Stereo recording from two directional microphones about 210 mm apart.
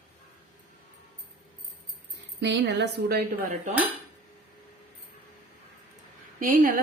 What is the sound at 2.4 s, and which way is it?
A woman's voice, 55° right (ahead or behind).